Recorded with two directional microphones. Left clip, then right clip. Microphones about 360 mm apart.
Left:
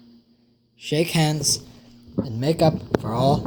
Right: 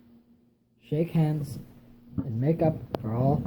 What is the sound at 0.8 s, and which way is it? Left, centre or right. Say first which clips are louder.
Speech: left 7 dB; centre.